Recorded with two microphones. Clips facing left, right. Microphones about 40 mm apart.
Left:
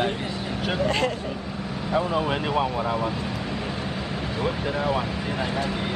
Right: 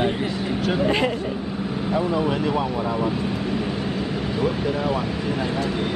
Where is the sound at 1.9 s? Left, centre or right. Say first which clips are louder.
Right 1 dB; centre.